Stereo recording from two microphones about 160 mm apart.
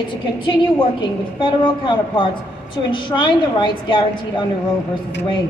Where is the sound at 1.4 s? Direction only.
30° left (ahead or behind).